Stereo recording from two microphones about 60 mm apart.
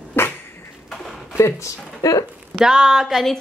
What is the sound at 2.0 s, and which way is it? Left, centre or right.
Speech, left.